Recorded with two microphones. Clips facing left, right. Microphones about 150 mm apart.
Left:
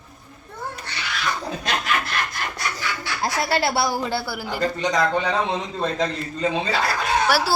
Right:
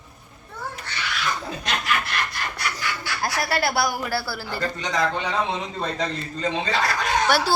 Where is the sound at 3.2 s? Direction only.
25° left (ahead or behind).